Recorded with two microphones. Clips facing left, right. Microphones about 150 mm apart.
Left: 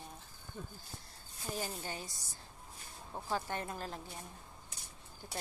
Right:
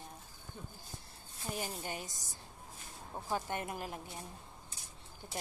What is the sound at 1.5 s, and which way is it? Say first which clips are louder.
Speech: even; 15° right (ahead or behind).